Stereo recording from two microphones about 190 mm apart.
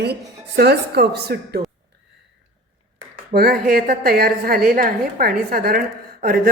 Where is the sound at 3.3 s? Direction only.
55° right (ahead or behind).